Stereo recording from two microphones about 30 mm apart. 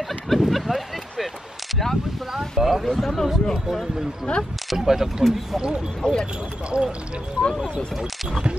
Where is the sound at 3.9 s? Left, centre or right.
Centre.